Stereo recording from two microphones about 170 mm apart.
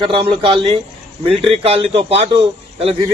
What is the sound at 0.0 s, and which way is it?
A man's voice, 30° right (ahead or behind).